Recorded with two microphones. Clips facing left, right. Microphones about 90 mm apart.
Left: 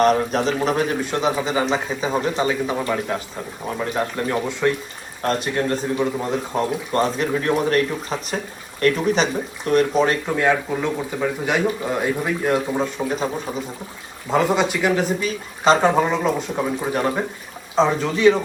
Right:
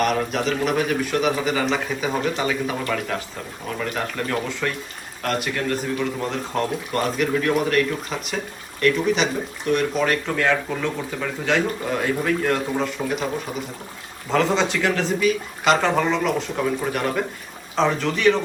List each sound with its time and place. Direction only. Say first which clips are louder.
0.0 s a man's voice: left 4 dB; 35° left (ahead or behind); by 7.0 s 20° left (ahead or behind)
7.0 s a man's voice: even; 30° left (ahead or behind)
10.2 s speech: left 2 dB; 15° left (ahead or behind)
14.3 s speech: left 2 dB; 15° left (ahead or behind)
15.2 s speech: right 1 dB; 30° left (ahead or behind)